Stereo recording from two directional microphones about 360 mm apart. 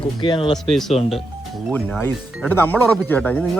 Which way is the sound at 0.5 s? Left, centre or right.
Centre.